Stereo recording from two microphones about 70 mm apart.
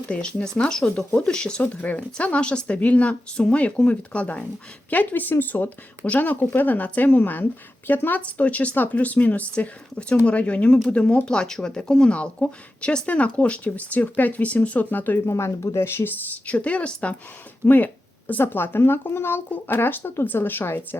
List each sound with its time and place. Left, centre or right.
0.1 s a woman's voice: centre
15.3 s speech: left